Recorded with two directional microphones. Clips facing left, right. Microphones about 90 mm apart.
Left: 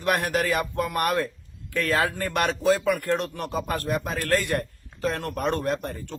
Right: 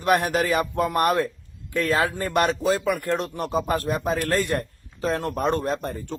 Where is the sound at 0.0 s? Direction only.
25° right (ahead or behind).